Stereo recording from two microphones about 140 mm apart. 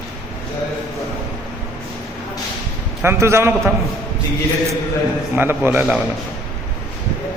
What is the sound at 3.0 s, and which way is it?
Speech, 20° right (ahead or behind).